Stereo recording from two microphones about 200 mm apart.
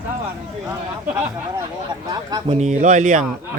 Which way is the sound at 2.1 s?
20° right (ahead or behind).